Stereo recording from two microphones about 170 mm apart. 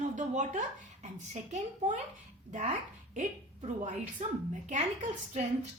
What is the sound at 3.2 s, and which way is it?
A woman's voice, 45° right (ahead or behind).